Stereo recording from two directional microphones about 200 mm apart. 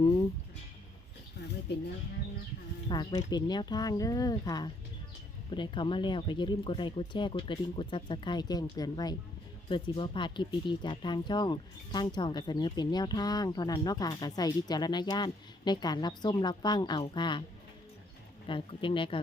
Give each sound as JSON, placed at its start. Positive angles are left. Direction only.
{"t": 0.0, "sound": "a sound", "side_deg": 25}
{"t": 2.9, "sound": "speech", "side_deg": 20}
{"t": 18.4, "sound": "speech", "side_deg": 25}